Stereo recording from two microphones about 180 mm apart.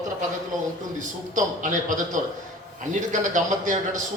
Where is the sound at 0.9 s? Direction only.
45° right (ahead or behind).